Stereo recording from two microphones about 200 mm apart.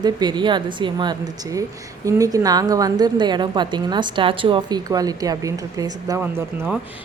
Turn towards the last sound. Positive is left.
turn(degrees=-5)  # may be behind; listen again after turning